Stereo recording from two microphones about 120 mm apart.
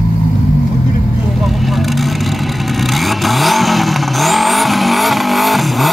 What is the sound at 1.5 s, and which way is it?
Vehicle, centre (ahead or behind).